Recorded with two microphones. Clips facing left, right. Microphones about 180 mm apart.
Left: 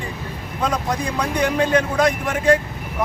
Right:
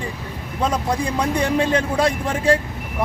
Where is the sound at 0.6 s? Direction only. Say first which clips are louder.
Right 1 dB; 30° right (ahead or behind).